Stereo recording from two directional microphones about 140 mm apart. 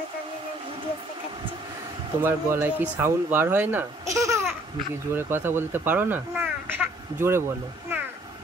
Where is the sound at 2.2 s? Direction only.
15° right (ahead or behind).